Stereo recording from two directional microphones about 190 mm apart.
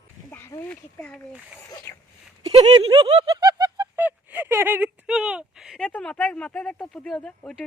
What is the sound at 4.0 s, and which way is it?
Speech, 10° right (ahead or behind).